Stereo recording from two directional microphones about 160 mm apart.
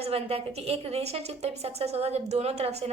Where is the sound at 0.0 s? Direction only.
40° right (ahead or behind).